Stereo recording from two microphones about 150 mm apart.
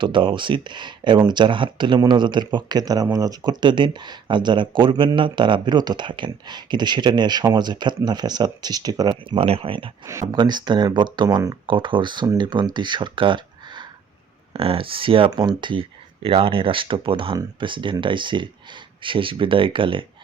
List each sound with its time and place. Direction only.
0.0 s speech: 35° right (ahead or behind)
10.1 s speech: 25° right (ahead or behind)